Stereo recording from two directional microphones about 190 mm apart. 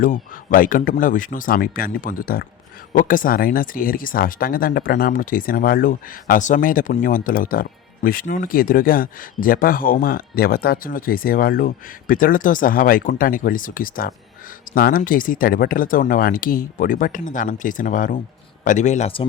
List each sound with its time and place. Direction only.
0.0 s speech: 45° left (ahead or behind); by 19.3 s 30° left (ahead or behind)